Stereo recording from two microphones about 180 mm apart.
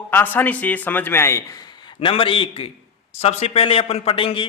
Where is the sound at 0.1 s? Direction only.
10° left (ahead or behind).